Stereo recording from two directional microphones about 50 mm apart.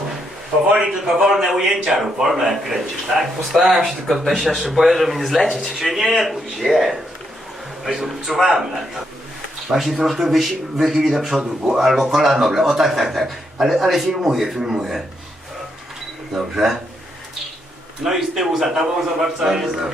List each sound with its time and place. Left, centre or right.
0.7 s a man's voice: centre
9.7 s a man's voice: centre
11.3 s a man's voice: centre
11.8 s a man's voice: centre
16.3 s a man's voice: centre
18.0 s a man's voice: centre